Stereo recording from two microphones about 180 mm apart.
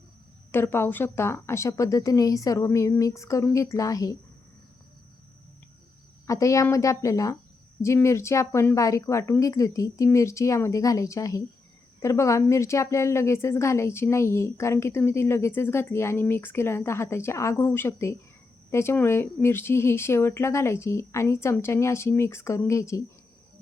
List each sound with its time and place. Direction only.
0.5 s a woman's voice: 15° left (ahead or behind)
6.2 s a woman's voice: 20° left (ahead or behind)